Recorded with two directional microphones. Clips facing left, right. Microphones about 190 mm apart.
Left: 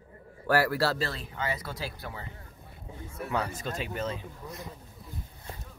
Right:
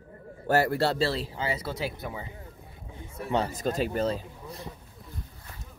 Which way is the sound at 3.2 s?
30° right (ahead or behind).